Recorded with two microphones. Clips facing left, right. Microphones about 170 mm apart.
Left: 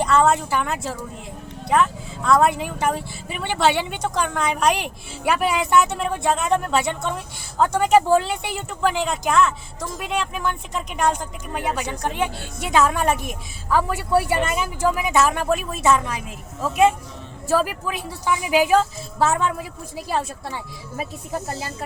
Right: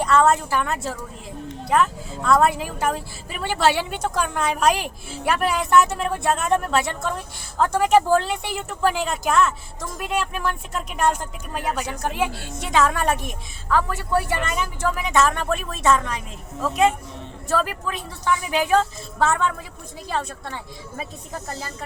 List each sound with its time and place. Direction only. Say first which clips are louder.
0.0 s a woman's voice: even; centre (ahead or behind)
21.3 s speech: left 5 dB; 20° left (ahead or behind)